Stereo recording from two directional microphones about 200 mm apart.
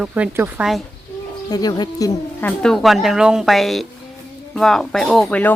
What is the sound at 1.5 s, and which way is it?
Speech, 20° left (ahead or behind).